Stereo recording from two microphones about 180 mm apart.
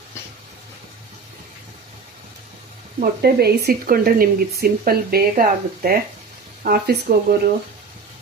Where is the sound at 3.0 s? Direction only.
55° right (ahead or behind).